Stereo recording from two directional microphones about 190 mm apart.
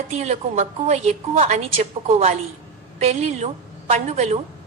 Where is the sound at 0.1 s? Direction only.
35° right (ahead or behind).